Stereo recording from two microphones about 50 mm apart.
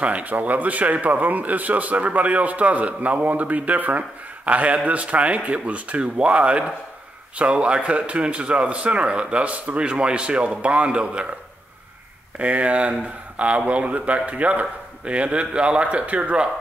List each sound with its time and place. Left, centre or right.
0.0 s a man's voice: right
12.4 s speech: right